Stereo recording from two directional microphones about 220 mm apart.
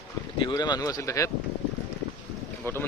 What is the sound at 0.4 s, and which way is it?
Speech, 20° left (ahead or behind).